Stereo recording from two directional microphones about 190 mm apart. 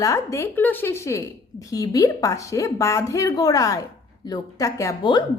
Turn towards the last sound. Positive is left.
turn(degrees=20)  # may be behind; listen again after turning